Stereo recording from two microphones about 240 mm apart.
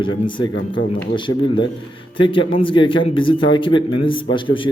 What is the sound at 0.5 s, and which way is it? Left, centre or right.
Speech, left.